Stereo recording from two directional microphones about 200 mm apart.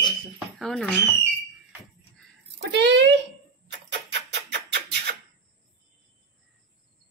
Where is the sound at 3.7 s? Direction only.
65° right (ahead or behind).